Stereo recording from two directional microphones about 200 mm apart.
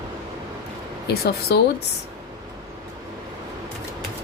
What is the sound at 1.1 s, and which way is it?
Speech, 55° left (ahead or behind).